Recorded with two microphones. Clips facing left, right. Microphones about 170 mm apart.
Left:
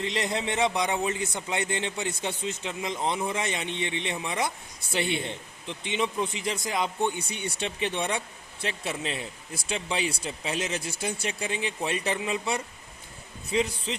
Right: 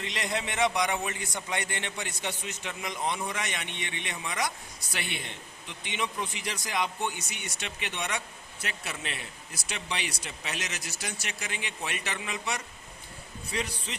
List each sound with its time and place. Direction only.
0.0 s a man's voice: 25° left (ahead or behind)